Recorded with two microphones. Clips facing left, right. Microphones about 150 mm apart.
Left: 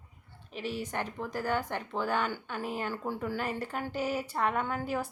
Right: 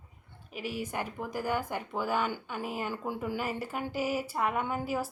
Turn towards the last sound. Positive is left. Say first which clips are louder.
# even
turn(degrees=-10)  # may be behind; listen again after turning